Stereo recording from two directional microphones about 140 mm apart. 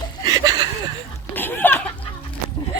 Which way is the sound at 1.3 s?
15° left (ahead or behind).